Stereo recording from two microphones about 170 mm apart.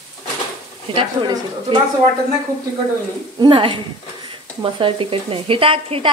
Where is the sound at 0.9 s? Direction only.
35° right (ahead or behind).